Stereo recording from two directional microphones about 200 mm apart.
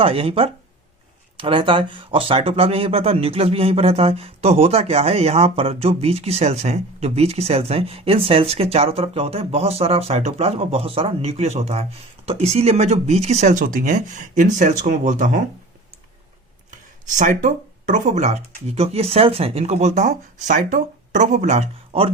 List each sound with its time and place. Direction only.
0.0 s speech: 30° right (ahead or behind)
17.2 s speech: 40° right (ahead or behind)